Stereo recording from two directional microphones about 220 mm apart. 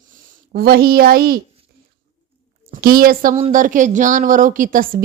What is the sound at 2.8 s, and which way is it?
A woman's voice, 40° right (ahead or behind).